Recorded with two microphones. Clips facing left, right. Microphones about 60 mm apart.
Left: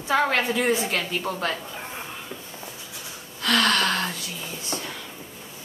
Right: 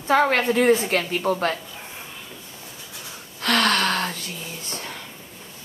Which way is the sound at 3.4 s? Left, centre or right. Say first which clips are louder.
Right 1 dB; right.